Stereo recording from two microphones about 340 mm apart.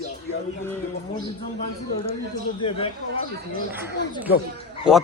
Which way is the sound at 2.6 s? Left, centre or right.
Centre.